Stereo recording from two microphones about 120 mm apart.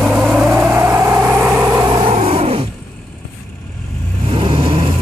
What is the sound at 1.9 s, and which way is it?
Vehicle, 50° right (ahead or behind).